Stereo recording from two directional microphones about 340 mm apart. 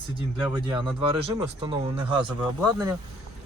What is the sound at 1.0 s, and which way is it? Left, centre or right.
Speech, centre.